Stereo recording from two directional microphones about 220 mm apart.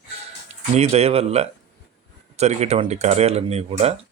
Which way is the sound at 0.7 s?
30° right (ahead or behind).